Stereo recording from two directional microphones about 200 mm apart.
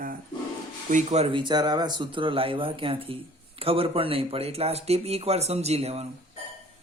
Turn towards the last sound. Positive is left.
turn(degrees=-30)  # may be behind; listen again after turning